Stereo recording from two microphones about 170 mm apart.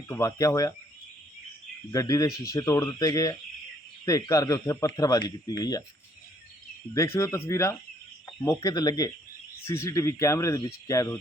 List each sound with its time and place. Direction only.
0.1 s speech: 20° left (ahead or behind)
1.9 s speech: 20° left (ahead or behind)
6.9 s speech: 15° left (ahead or behind)